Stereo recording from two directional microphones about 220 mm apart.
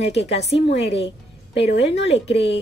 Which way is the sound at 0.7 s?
50° left (ahead or behind).